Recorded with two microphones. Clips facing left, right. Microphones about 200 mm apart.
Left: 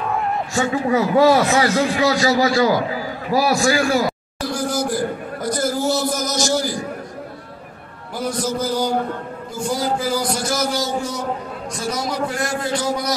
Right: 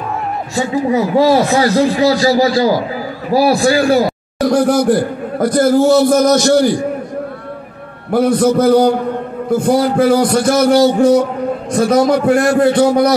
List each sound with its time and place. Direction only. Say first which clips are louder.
0.8 s a man's voice: right 3 dB; 20° right (ahead or behind)
1.3 s a man's voice: right 5 dB; 35° right (ahead or behind)
4.4 s a man's voice: right 11 dB; 65° right (ahead or behind)
8.1 s a man's voice: right 12 dB; 60° right (ahead or behind)